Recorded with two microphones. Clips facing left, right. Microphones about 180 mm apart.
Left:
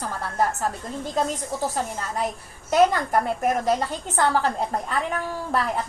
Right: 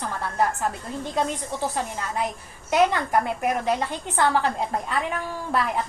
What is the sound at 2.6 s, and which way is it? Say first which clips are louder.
A woman's voice: left 2 dB; 40° left (ahead or behind).